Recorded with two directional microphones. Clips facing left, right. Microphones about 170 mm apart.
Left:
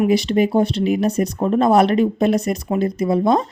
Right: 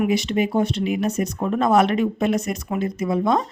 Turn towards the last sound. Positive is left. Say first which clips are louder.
# left 4 dB
turn(degrees=35)  # may be behind; listen again after turning